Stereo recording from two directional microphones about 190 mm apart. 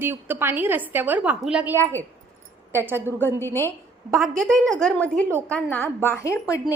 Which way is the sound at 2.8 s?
10° right (ahead or behind).